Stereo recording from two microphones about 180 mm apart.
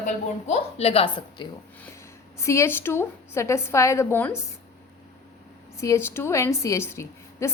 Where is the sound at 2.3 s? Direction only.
15° left (ahead or behind).